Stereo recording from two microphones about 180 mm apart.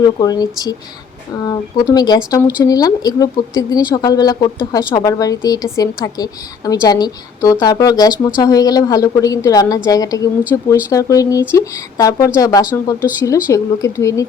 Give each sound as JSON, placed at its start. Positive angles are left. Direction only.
{"t": 0.2, "sound": "a woman's voice", "side_deg": 20}